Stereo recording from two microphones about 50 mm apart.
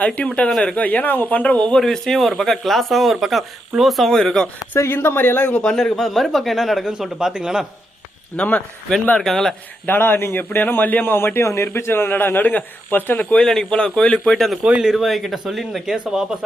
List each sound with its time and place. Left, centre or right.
0.0 s speech: left
1.7 s speech: centre
4.9 s a man's voice: left
5.6 s speech: centre
8.4 s speech: left
9.2 s speech: centre
9.8 s a man's voice: left
11.3 s a man's voice: left
12.5 s speech: left
13.4 s speech: centre